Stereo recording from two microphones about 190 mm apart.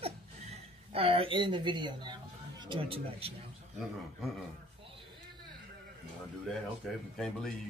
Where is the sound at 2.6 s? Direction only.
30° right (ahead or behind).